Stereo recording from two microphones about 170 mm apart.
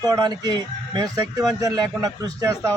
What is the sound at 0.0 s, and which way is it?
A man's voice, 25° right (ahead or behind).